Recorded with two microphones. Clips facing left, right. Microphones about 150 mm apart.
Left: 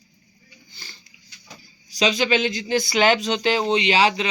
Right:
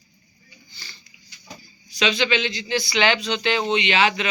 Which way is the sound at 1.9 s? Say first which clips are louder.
Left 2 dB; 40° left (ahead or behind).